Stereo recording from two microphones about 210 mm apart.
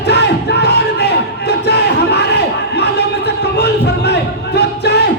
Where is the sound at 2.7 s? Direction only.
50° left (ahead or behind).